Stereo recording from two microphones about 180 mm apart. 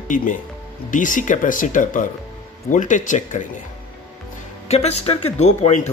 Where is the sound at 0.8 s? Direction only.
45° left (ahead or behind).